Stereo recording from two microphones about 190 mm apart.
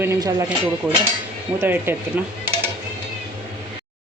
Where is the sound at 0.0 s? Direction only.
15° right (ahead or behind).